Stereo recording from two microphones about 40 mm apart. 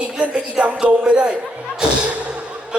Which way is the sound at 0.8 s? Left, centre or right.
Right.